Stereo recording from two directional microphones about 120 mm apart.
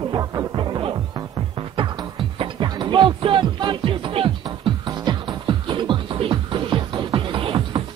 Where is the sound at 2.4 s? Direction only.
40° right (ahead or behind).